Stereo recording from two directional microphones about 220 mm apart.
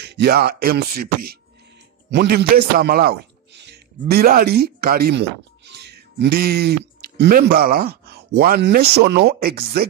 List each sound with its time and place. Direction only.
0.0 s speech: 50° right (ahead or behind)